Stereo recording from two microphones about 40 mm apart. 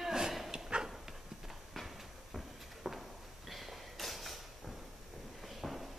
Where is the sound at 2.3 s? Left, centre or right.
Centre.